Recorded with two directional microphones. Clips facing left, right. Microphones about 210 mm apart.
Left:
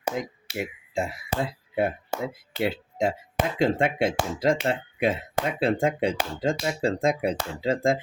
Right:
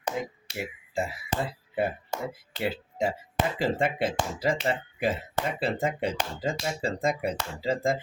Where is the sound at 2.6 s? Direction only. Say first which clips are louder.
Left 3 dB; 5° right (ahead or behind).